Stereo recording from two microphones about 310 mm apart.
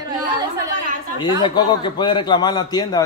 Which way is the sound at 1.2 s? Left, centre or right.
Centre.